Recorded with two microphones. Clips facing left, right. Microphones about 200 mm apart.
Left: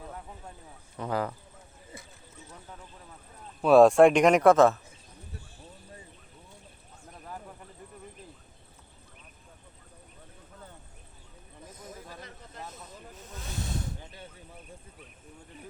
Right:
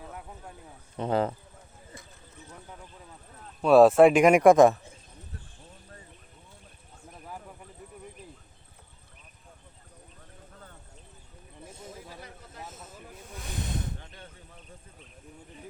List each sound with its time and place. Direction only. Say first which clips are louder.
0.9 s speech: right 4 dB; 25° right (ahead or behind)
3.6 s speech: right 1 dB; centre (ahead or behind)
5.3 s clip-clop: left 2 dB; 10° left (ahead or behind)
11.9 s snake: left 2 dB; 10° right (ahead or behind)
14.0 s a sound: left 2 dB; 10° left (ahead or behind)